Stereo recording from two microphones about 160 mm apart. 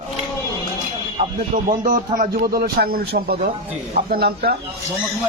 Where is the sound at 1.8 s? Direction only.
60° right (ahead or behind).